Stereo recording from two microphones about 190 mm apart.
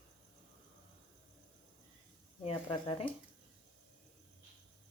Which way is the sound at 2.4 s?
25° left (ahead or behind).